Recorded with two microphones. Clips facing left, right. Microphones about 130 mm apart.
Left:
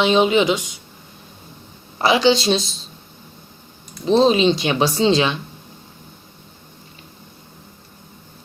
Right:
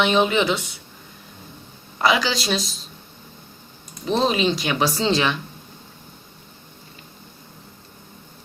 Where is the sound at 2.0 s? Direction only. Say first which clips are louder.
Left 5 dB; 30° left (ahead or behind).